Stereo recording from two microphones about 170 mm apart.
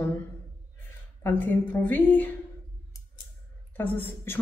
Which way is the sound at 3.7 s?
10° left (ahead or behind).